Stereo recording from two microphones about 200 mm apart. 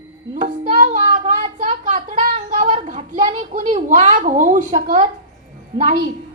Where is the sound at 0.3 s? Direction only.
40° right (ahead or behind).